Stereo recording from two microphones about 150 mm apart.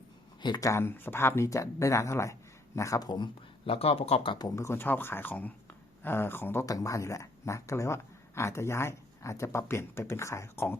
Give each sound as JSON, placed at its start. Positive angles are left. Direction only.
{"t": 0.4, "sound": "speech", "side_deg": 25}
{"t": 3.7, "sound": "speech", "side_deg": 40}